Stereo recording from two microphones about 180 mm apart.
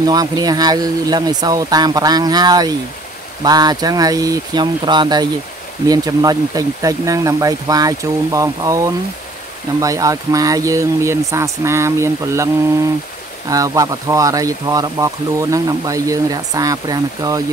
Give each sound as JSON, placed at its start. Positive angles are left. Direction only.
{"t": 0.0, "sound": "speech", "side_deg": -20}
{"t": 13.5, "sound": "speech", "side_deg": -20}